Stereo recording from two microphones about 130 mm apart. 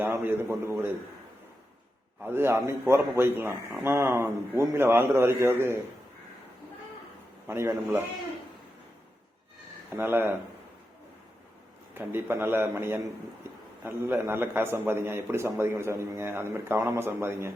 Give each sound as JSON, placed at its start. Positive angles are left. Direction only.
{"t": 0.0, "sound": "a man's voice", "side_deg": -15}
{"t": 2.2, "sound": "a man's voice", "side_deg": -20}
{"t": 7.4, "sound": "a man's voice", "side_deg": -20}
{"t": 9.9, "sound": "a man's voice", "side_deg": -15}
{"t": 11.9, "sound": "a man's voice", "side_deg": -15}
{"t": 13.5, "sound": "a sound", "side_deg": -20}
{"t": 13.8, "sound": "a man's voice", "side_deg": -20}